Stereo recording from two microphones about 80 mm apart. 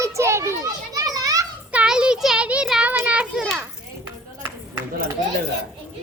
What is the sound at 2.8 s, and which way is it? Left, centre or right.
Children playing, centre.